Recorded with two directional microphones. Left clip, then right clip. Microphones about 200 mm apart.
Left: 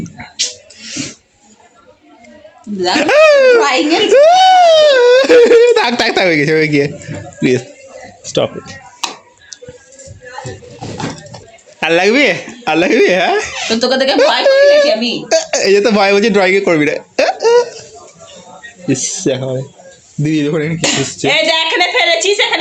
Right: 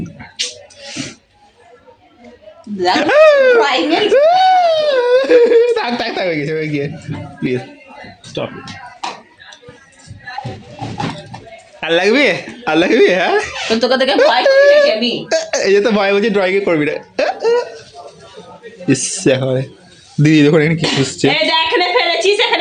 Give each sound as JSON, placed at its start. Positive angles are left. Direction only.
{"t": 2.7, "sound": "a child's voice", "side_deg": 5}
{"t": 11.8, "sound": "speech", "side_deg": 15}
{"t": 18.9, "sound": "speech", "side_deg": -15}
{"t": 20.2, "sound": "speech", "side_deg": -30}
{"t": 21.0, "sound": "music", "side_deg": -25}
{"t": 21.2, "sound": "a sound", "side_deg": 35}